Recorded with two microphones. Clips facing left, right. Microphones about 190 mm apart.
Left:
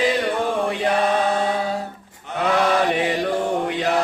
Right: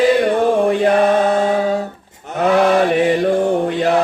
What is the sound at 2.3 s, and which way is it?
Mantra, 45° right (ahead or behind).